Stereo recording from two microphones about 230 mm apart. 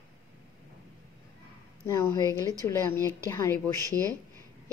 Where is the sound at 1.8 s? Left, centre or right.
Centre.